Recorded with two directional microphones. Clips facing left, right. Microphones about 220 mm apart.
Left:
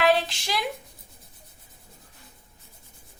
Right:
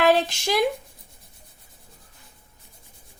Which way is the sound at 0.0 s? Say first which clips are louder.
Right 3 dB; 45° right (ahead or behind).